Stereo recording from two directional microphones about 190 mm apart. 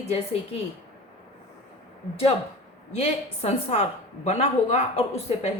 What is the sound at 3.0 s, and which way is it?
A woman's voice, 35° left (ahead or behind).